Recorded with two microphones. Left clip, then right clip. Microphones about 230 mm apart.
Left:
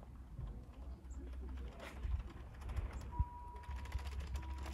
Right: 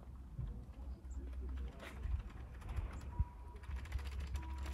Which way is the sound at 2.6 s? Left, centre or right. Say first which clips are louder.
Left 1 dB; left.